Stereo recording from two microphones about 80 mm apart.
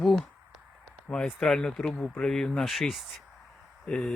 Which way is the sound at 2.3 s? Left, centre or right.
Centre.